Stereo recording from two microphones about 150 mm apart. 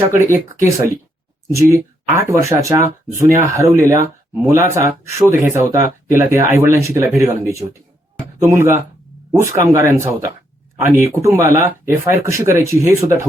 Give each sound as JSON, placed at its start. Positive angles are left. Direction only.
{"t": 1.5, "sound": "speech", "side_deg": -20}